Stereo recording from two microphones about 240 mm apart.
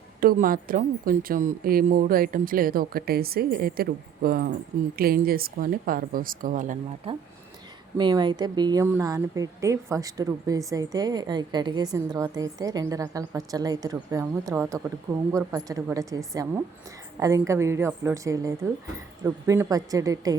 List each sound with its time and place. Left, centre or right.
0.2 s speech: right; by 20.3 s centre